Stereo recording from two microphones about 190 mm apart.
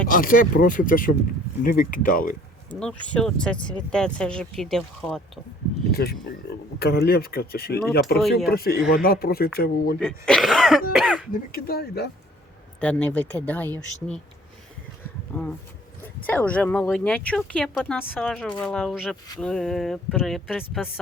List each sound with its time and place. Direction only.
0.1 s speech: 45° left (ahead or behind)
2.6 s speech: 5° left (ahead or behind)
5.9 s speech: 55° left (ahead or behind)
10.0 s speech: 5° left (ahead or behind)
11.5 s speech: 55° left (ahead or behind)
12.8 s speech: 5° left (ahead or behind)
15.3 s speech: 10° left (ahead or behind)